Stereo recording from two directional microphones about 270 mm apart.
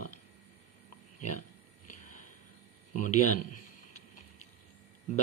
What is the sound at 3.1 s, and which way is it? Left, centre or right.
Speech, left.